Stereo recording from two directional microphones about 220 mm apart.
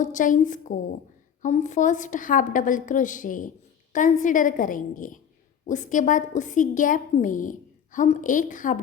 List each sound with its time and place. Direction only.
0.0 s a woman's voice: 35° left (ahead or behind)